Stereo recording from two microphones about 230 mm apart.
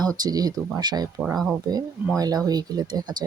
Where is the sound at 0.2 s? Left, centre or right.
Centre.